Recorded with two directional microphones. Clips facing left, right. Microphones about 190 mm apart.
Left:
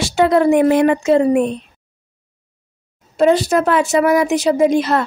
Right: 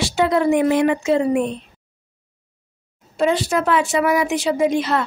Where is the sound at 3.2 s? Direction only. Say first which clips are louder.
Left 5 dB; 40° left (ahead or behind).